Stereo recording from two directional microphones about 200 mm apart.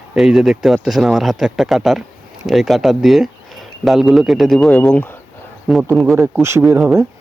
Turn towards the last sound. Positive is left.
turn(degrees=-10)  # may be behind; listen again after turning